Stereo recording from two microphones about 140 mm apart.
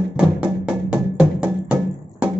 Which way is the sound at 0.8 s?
10° right (ahead or behind).